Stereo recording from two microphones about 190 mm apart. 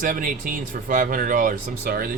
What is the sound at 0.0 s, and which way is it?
Speech, 45° right (ahead or behind).